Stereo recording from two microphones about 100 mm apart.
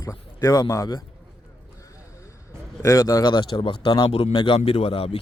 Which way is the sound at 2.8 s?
30° left (ahead or behind).